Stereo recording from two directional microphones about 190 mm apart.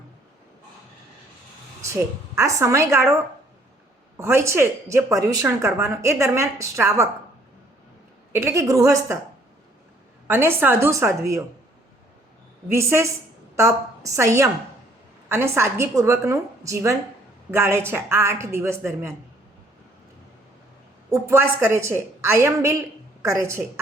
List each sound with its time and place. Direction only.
1.8 s speech: 15° right (ahead or behind)
4.2 s speech: 15° right (ahead or behind)
8.3 s speech: 15° right (ahead or behind)
10.2 s speech: 10° right (ahead or behind)
12.7 s speech: 15° right (ahead or behind)
21.1 s speech: 15° right (ahead or behind)